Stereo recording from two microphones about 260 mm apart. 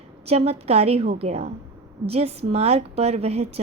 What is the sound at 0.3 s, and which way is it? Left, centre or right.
A woman's voice, right.